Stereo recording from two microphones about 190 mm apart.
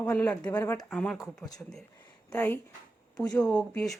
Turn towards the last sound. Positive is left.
turn(degrees=5)  # may be behind; listen again after turning